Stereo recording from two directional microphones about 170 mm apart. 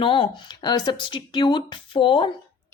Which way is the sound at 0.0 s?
30° left (ahead or behind).